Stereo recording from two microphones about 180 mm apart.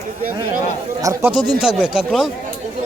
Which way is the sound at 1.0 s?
15° right (ahead or behind).